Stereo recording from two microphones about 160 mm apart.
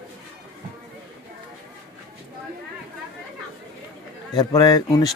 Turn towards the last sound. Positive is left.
turn(degrees=25)  # may be behind; listen again after turning